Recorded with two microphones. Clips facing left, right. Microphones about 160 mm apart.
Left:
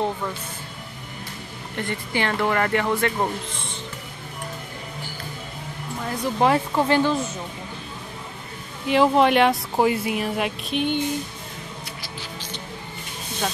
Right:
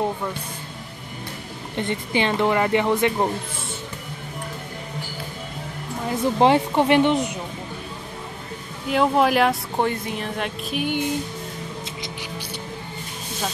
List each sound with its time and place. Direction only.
1.8 s speech: 20° right (ahead or behind)
6.0 s speech: 25° right (ahead or behind)
8.8 s speech: centre (ahead or behind)
10.7 s music: 10° right (ahead or behind)